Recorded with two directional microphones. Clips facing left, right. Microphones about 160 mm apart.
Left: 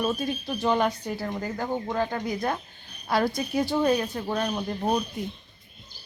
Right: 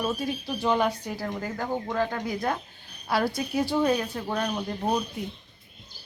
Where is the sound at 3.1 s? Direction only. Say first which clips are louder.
Left 1 dB; 5° right (ahead or behind).